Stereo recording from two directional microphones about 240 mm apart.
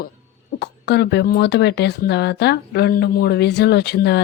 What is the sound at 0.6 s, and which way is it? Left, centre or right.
Speech, left.